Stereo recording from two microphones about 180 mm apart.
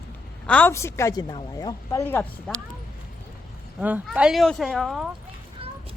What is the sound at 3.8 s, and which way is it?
Speech, 5° right (ahead or behind).